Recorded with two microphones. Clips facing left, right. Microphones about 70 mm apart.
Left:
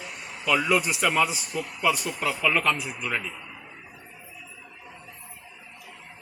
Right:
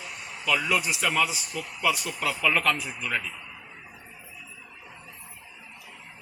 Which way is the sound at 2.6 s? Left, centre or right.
Centre.